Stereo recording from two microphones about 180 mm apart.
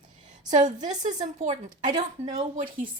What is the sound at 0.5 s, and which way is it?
A woman's voice, 40° right (ahead or behind).